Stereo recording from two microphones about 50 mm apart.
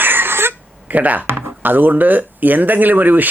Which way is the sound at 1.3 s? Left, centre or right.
Right.